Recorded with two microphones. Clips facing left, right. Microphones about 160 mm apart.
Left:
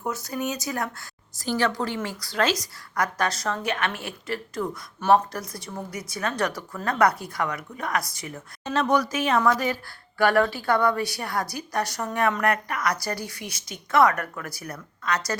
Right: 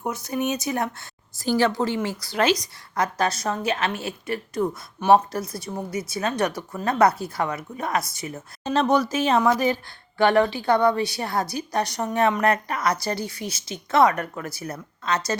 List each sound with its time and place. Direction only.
0.0 s a woman's voice: 20° right (ahead or behind)